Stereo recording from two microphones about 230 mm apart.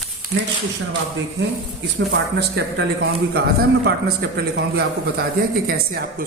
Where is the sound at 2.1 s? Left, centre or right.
Right.